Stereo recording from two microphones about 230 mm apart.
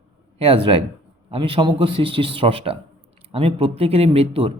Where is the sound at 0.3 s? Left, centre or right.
Right.